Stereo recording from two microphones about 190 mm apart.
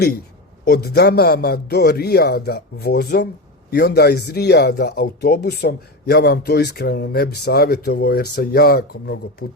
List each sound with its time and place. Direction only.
0.6 s speech: 55° left (ahead or behind)